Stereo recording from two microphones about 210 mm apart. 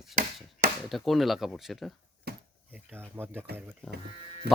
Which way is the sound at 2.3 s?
50° right (ahead or behind).